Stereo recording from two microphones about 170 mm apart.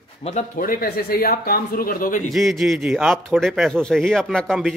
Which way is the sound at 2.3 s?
Centre (ahead or behind).